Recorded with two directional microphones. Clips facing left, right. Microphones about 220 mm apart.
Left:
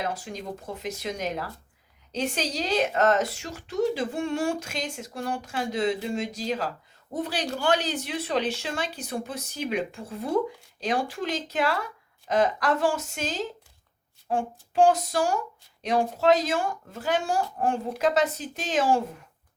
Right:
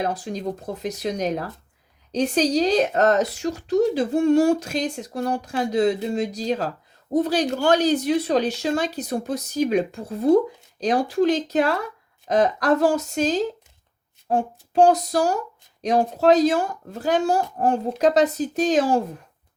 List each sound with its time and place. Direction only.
0.0 s speech: 35° right (ahead or behind)